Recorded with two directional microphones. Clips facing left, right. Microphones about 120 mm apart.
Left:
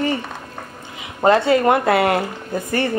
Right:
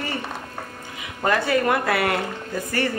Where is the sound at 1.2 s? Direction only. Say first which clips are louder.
Left 6 dB; 25° left (ahead or behind).